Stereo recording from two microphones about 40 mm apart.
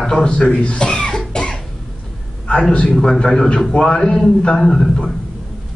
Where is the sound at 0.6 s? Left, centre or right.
Left.